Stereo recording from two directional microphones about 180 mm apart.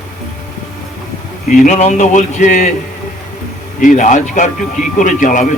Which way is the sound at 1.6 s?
40° left (ahead or behind).